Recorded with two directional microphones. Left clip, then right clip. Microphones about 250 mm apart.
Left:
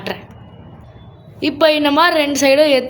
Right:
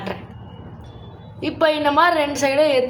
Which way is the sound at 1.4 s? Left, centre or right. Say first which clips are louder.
Left 5 dB; left.